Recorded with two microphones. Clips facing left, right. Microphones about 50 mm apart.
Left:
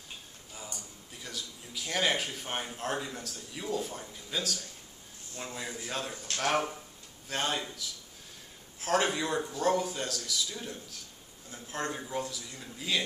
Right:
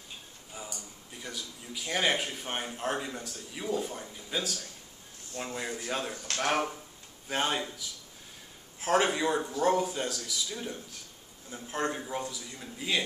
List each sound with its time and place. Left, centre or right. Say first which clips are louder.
1.2 s speech: right 1 dB; centre
8.8 s speech: right 3 dB; centre